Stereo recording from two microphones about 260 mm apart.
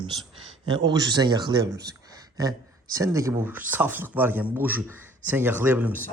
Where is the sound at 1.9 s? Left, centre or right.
Centre.